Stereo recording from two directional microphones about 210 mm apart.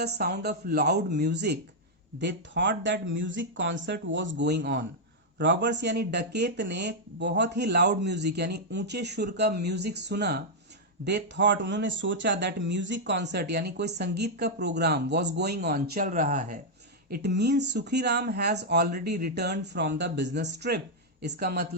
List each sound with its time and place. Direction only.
0.0 s speech: 50° right (ahead or behind)
17.1 s speech: 50° right (ahead or behind)